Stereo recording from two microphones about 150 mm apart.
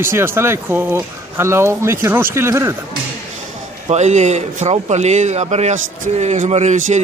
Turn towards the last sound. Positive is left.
turn(degrees=-50)  # may be behind; listen again after turning